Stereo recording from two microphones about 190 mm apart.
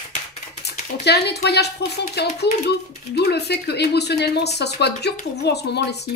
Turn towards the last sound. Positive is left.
turn(degrees=60)  # may be behind; listen again after turning